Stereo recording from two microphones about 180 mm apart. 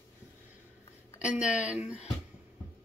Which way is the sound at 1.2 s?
5° right (ahead or behind).